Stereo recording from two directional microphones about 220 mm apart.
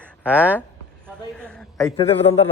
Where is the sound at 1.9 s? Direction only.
25° left (ahead or behind).